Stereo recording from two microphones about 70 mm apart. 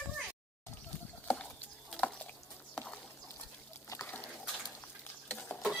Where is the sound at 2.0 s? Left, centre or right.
Centre.